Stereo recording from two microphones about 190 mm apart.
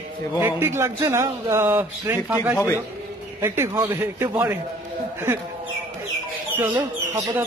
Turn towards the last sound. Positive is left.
turn(degrees=-15)  # may be behind; listen again after turning